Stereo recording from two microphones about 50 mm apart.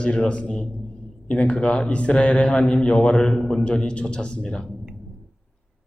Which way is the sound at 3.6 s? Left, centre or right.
Centre.